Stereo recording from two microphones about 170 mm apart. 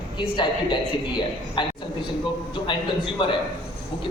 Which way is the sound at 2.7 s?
30° left (ahead or behind).